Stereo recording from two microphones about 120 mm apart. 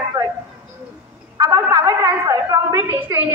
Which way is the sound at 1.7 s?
25° right (ahead or behind).